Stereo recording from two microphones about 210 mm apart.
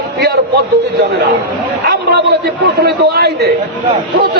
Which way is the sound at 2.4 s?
50° right (ahead or behind).